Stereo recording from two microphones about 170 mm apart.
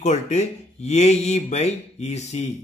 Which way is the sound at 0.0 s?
40° left (ahead or behind).